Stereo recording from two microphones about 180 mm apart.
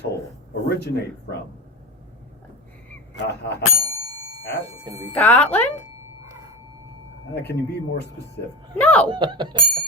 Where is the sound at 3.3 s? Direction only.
65° left (ahead or behind).